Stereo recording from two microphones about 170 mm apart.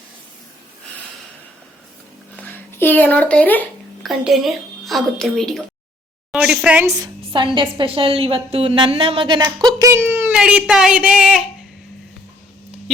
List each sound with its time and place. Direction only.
2.3 s a sound: 10° left (ahead or behind)
4.1 s a woman's voice: centre (ahead or behind); by 7.1 s 20° right (ahead or behind)
7.2 s a woman's voice: 30° right (ahead or behind)
9.9 s speech: 15° right (ahead or behind)